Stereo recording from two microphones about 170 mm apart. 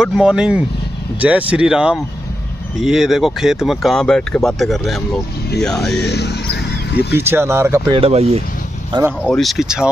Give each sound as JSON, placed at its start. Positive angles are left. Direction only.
{"t": 0.0, "sound": "speech", "side_deg": -5}
{"t": 5.9, "sound": "speech", "side_deg": 80}
{"t": 7.2, "sound": "speech", "side_deg": -15}
{"t": 7.9, "sound": "speech", "side_deg": -35}
{"t": 9.2, "sound": "speech", "side_deg": 5}